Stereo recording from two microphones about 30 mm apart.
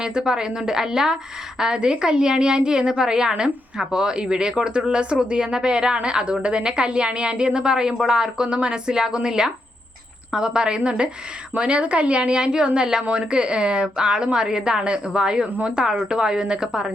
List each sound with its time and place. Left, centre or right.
0.0 s a woman's voice: right